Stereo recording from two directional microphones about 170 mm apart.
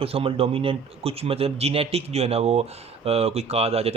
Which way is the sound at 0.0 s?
35° right (ahead or behind).